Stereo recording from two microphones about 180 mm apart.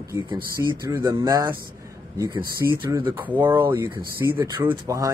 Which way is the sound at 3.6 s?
15° right (ahead or behind).